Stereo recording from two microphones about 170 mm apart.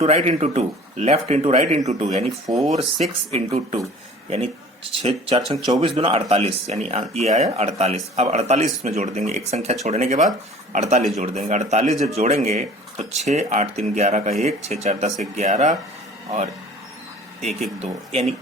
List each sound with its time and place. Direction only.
0.0 s speech: 40° right (ahead or behind)
6.0 s speech: 35° right (ahead or behind)
17.7 s speech: 35° right (ahead or behind)